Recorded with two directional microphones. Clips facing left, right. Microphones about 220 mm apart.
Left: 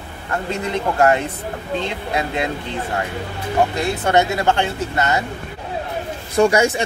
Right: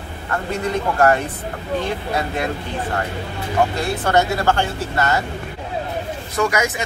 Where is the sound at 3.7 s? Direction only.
20° left (ahead or behind).